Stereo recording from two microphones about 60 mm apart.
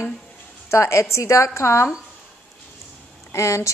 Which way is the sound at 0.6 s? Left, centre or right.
Left.